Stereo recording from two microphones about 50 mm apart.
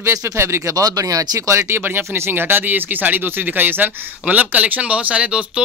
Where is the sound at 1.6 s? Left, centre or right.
Right.